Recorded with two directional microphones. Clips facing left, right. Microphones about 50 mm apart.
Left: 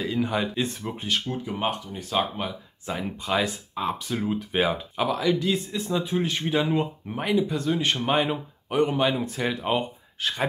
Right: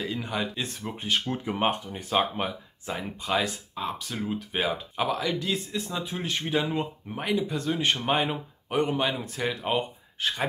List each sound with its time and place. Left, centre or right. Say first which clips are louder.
0.0 s speech: left 5 dB; centre
1.0 s speech: even; centre
1.3 s speech: right 1 dB; right
2.9 s speech: left 2 dB; centre
3.7 s speech: left 4 dB; centre
4.9 s speech: left 4 dB; centre